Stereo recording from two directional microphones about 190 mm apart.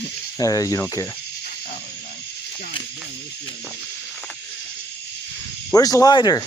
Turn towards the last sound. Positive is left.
turn(degrees=20)  # may be behind; listen again after turning